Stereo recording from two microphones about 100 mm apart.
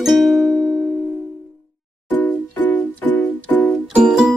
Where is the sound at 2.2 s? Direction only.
15° left (ahead or behind).